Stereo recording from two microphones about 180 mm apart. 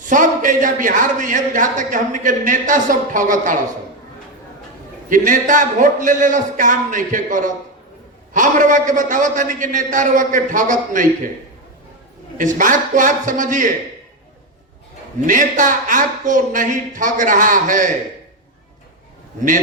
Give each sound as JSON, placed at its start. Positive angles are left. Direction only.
{"t": 0.0, "sound": "speech", "side_deg": -45}
{"t": 5.0, "sound": "speech", "side_deg": -45}
{"t": 12.5, "sound": "speech", "side_deg": -45}
{"t": 15.3, "sound": "speech", "side_deg": -45}